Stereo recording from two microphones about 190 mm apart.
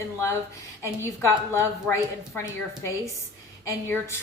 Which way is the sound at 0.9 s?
15° left (ahead or behind).